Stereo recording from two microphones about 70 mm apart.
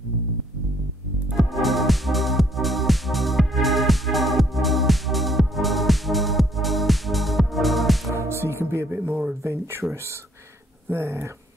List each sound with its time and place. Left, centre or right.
1.3 s music: centre
8.1 s music: right
9.4 s speech: right
10.9 s speech: right